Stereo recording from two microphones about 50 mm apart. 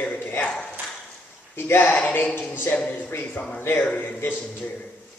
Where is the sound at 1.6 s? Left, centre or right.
Left.